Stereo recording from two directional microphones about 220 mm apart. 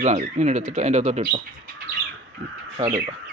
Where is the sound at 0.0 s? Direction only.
30° right (ahead or behind).